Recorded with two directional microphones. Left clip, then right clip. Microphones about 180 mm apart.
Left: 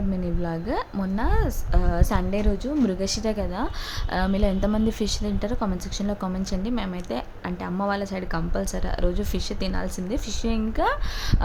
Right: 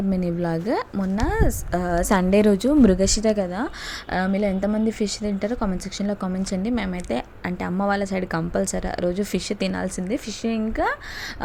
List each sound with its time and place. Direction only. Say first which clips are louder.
0.1 s a woman's voice: right 6 dB; 25° right (ahead or behind); by 2.9 s 55° right (ahead or behind)
2.9 s a woman's voice: right 6 dB; 35° right (ahead or behind)
4.1 s a woman's voice: right 2 dB; 10° right (ahead or behind)